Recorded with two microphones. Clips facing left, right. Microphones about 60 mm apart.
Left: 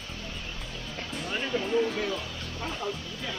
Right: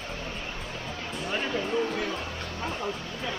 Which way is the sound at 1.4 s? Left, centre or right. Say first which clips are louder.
Left 2 dB; centre.